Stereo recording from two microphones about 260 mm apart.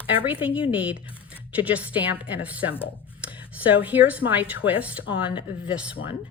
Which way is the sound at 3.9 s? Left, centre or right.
Centre.